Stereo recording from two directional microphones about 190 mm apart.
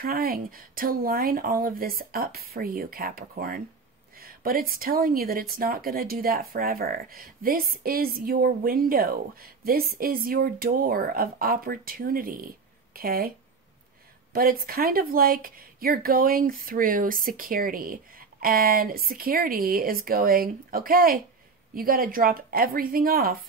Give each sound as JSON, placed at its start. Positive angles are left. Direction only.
{"t": 0.0, "sound": "speech", "side_deg": -50}
{"t": 14.3, "sound": "speech", "side_deg": -50}